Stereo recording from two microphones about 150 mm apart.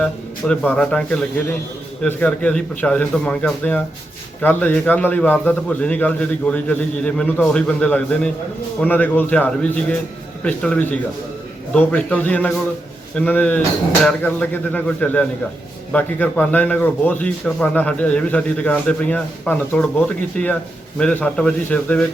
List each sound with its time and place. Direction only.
0.0 s a man's voice: 5° left (ahead or behind)